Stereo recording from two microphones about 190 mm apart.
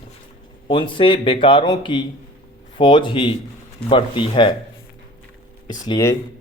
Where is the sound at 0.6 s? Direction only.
25° left (ahead or behind).